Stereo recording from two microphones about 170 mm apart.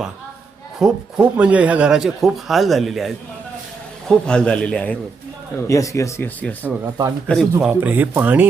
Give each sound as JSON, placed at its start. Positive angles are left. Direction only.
{"t": 0.8, "sound": "speech", "side_deg": -5}
{"t": 4.1, "sound": "speech", "side_deg": 5}
{"t": 5.6, "sound": "speech", "side_deg": 20}
{"t": 7.7, "sound": "speech", "side_deg": -10}